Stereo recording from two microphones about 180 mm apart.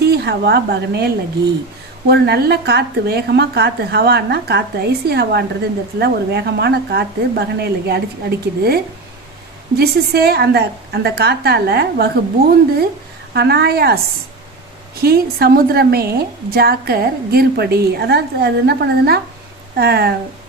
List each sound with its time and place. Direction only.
0.0 s a woman's voice: 65° right (ahead or behind)
13.3 s a woman's voice: 65° right (ahead or behind)
15.0 s a woman's voice: 60° right (ahead or behind)